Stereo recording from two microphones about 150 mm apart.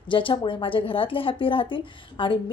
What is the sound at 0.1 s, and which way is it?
A woman's voice, 35° left (ahead or behind).